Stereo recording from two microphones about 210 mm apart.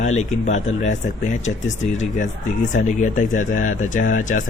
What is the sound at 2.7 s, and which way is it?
Speech, 35° left (ahead or behind).